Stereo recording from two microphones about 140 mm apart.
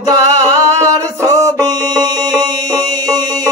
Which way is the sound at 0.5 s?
25° right (ahead or behind).